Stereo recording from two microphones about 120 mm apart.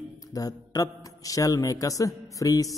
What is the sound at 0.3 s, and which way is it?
A man's voice, 30° left (ahead or behind).